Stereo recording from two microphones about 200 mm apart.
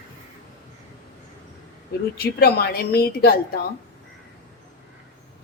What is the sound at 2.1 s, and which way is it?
A woman's voice, 50° left (ahead or behind).